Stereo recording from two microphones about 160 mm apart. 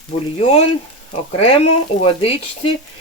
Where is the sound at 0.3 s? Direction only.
40° left (ahead or behind).